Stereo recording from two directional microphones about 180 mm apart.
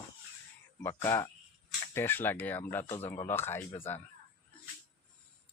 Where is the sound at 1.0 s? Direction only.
15° left (ahead or behind).